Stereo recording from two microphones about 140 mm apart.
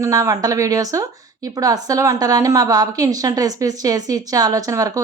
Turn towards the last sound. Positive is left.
turn(degrees=-25)  # may be behind; listen again after turning